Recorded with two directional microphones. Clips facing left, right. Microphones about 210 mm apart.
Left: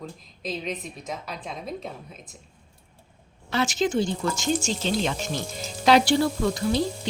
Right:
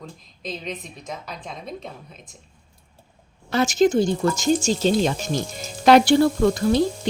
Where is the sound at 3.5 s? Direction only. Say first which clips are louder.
Right 6 dB; 45° right (ahead or behind).